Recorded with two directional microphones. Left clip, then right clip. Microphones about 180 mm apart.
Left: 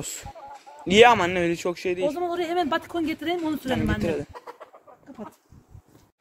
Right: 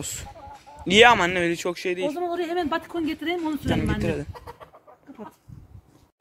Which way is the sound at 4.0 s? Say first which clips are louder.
Left 1 dB; 5° left (ahead or behind).